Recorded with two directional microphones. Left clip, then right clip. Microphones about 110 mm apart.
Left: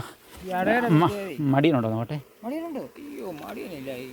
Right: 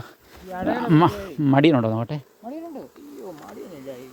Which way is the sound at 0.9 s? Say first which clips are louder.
Right 4 dB; 90° right.